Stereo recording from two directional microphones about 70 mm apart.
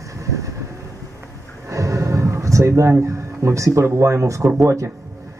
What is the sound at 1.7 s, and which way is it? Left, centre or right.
Music, right.